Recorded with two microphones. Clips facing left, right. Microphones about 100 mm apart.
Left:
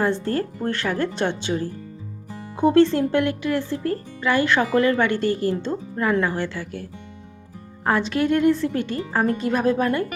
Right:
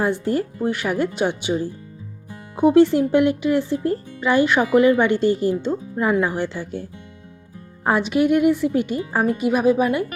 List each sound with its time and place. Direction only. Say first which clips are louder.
0.0 s speech: right 1 dB; 15° right (ahead or behind)
7.9 s speech: right 3 dB; 15° right (ahead or behind)